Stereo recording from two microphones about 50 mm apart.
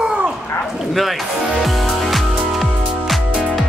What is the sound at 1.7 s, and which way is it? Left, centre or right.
Music, centre.